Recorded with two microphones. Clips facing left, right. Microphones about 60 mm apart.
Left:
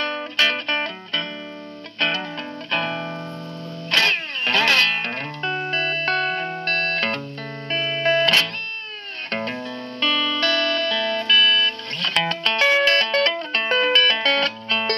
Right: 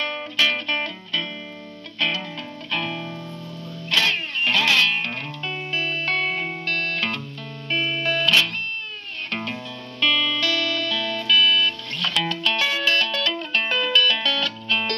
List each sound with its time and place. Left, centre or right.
0.4 s music: left